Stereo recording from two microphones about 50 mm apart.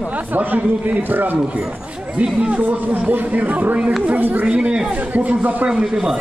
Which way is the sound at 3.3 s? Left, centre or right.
Right.